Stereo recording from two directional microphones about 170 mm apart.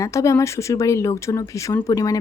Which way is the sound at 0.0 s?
20° left (ahead or behind).